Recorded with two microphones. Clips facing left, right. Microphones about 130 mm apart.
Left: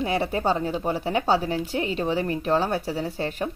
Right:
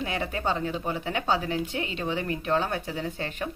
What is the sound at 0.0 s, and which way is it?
A woman's voice, 35° left (ahead or behind).